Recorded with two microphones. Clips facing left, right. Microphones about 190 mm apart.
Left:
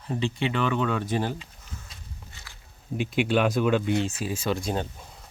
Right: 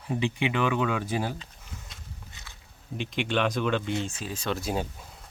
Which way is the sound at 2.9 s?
5° left (ahead or behind).